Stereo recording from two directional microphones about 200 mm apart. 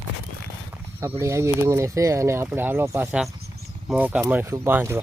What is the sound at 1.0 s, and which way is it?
Speech, 15° right (ahead or behind).